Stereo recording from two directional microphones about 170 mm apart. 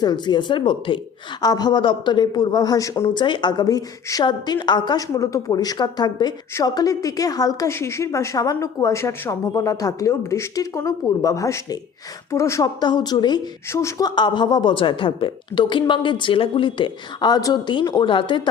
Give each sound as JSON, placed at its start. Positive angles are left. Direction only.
{"t": 0.0, "sound": "a man's voice", "side_deg": 25}